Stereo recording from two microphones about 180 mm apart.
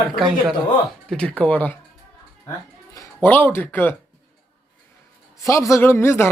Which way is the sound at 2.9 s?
10° left (ahead or behind).